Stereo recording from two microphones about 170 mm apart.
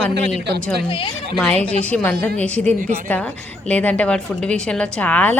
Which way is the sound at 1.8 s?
10° left (ahead or behind).